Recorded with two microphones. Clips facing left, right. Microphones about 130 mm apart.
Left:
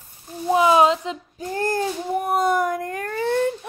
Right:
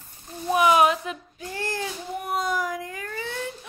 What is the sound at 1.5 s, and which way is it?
Speech, 45° left (ahead or behind).